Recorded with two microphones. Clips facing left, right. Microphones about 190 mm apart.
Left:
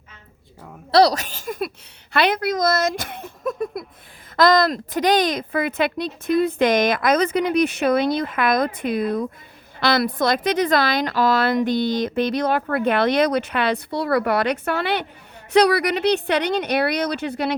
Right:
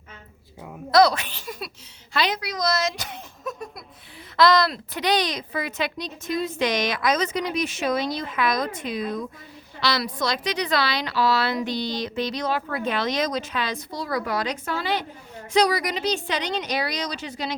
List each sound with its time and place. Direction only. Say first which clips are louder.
0.9 s a woman's voice: left 2 dB; 35° left (ahead or behind); by 17.6 s 60° left (ahead or behind)